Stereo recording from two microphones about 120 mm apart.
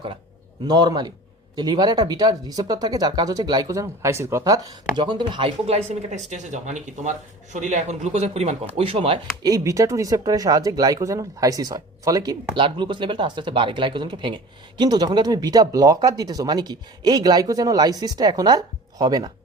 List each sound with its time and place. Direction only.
0.7 s speech: 35° right (ahead or behind)
5.6 s speech: 65° right (ahead or behind)
8.8 s speech: 50° right (ahead or behind)
9.4 s speech: 30° right (ahead or behind)
12.5 s speech: 45° right (ahead or behind)